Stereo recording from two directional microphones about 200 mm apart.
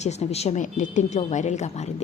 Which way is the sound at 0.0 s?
35° left (ahead or behind).